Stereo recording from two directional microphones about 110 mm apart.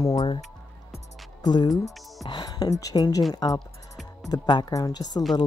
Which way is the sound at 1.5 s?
45° left (ahead or behind).